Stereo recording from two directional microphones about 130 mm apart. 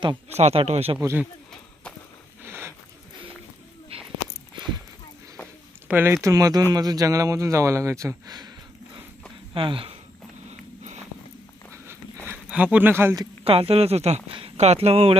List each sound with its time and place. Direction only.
0.3 s speech: 55° right (ahead or behind)
1.0 s speech: 15° right (ahead or behind)
2.4 s a sound: 20° right (ahead or behind)
3.9 s a sound: 45° right (ahead or behind)
5.9 s speech: 15° right (ahead or behind)
6.2 s speech: 25° right (ahead or behind)
9.6 s speech: 45° right (ahead or behind)
10.5 s a sound: 60° right (ahead or behind)
12.3 s speech: 10° right (ahead or behind)
13.4 s speech: 45° right (ahead or behind)